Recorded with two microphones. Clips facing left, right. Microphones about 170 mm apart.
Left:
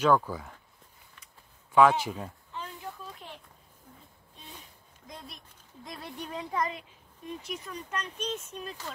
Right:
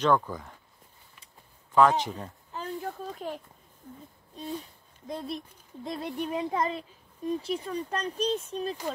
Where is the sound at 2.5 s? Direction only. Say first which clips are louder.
Right 10 dB; 40° right (ahead or behind).